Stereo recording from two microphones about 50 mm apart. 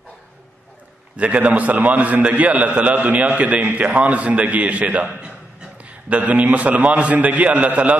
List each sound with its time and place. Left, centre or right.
1.1 s a man's voice: right